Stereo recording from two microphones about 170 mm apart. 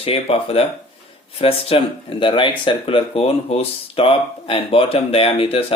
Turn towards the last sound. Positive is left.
turn(degrees=35)  # may be behind; listen again after turning